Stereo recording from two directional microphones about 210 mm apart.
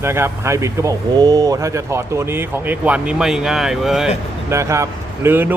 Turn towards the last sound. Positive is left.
turn(degrees=-10)  # may be behind; listen again after turning